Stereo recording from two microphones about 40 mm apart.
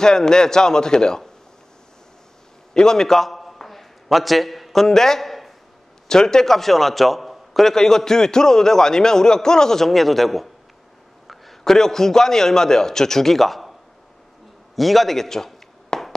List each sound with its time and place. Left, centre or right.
0.0 s a man's voice: centre
2.7 s a sound: centre
6.0 s a man's voice: centre
7.7 s a man's voice: centre
14.8 s chop: centre